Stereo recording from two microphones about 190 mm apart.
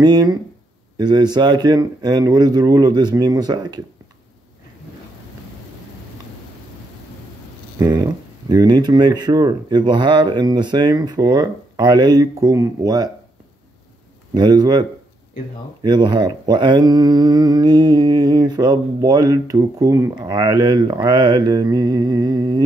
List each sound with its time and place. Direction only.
0.0 s speech: 20° right (ahead or behind)
7.8 s speech: 20° right (ahead or behind)
14.3 s speech: 20° right (ahead or behind)